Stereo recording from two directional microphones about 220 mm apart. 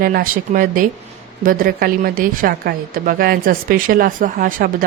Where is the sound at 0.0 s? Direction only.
40° right (ahead or behind).